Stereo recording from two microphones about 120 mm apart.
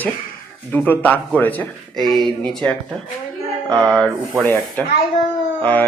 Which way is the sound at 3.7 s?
5° left (ahead or behind).